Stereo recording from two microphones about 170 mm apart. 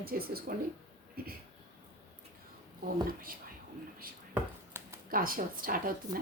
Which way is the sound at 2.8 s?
55° right (ahead or behind).